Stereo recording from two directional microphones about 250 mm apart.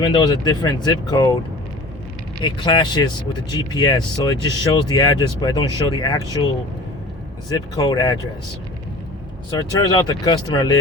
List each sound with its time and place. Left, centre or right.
0.0 s speech: centre
2.4 s speech: centre
7.5 s speech: centre
9.5 s speech: centre